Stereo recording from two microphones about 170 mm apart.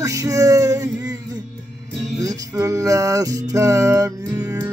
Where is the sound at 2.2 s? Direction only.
20° right (ahead or behind).